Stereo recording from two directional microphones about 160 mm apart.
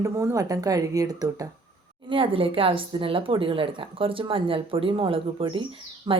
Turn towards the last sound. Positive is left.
turn(degrees=-35)  # may be behind; listen again after turning